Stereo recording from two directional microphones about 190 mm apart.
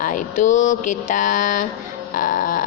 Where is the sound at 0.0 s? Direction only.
45° left (ahead or behind).